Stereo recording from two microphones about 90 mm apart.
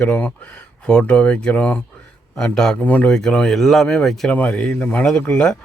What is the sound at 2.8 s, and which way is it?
Speech, 20° left (ahead or behind).